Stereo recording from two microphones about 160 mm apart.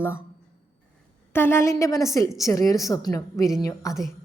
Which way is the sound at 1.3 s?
15° left (ahead or behind).